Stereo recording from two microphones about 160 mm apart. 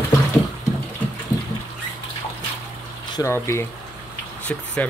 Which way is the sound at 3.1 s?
15° left (ahead or behind).